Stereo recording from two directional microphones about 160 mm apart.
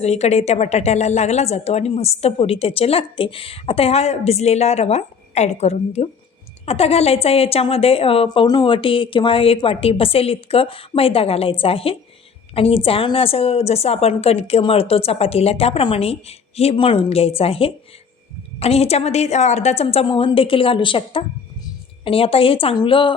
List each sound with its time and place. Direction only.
0.0 s a woman's voice: 40° left (ahead or behind)